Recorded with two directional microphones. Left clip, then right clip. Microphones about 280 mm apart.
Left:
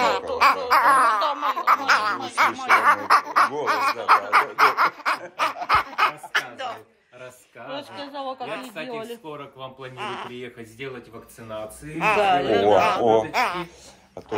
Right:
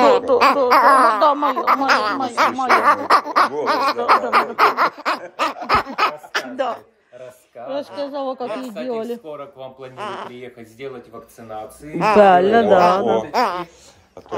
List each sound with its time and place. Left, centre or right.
0.3 s a sound: right
2.8 s speech: right
5.4 s a sound: right
7.7 s speech: right
12.0 s speech: right
13.0 s speech: centre
13.3 s speech: right